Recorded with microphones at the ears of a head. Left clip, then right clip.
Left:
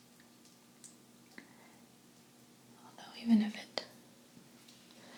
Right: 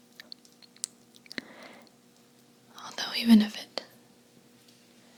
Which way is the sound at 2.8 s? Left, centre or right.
Right.